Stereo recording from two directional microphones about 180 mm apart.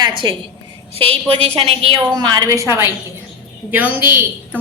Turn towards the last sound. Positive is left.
turn(degrees=-10)  # may be behind; listen again after turning